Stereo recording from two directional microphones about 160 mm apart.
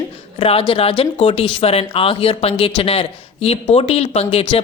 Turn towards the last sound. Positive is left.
turn(degrees=40)  # may be behind; listen again after turning